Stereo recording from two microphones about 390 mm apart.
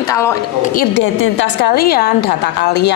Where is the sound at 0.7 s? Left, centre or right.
Left.